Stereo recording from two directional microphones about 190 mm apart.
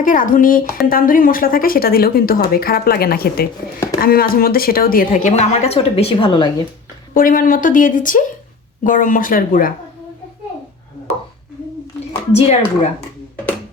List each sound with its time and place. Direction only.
0.0 s speech: 45° left (ahead or behind); by 6.5 s 25° left (ahead or behind)
7.1 s speech: 45° left (ahead or behind)
12.3 s a woman's voice: 35° left (ahead or behind)
13.0 s a sound: 10° left (ahead or behind)